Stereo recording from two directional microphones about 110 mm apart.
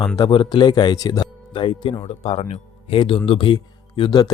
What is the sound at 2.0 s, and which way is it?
Speech, 60° left (ahead or behind).